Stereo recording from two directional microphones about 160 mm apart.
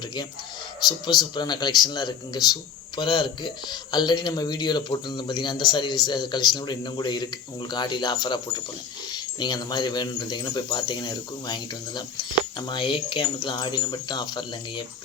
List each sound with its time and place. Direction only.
0.9 s a man's voice: 25° left (ahead or behind)